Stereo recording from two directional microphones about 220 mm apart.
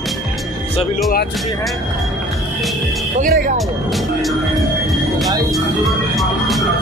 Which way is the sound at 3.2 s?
40° right (ahead or behind).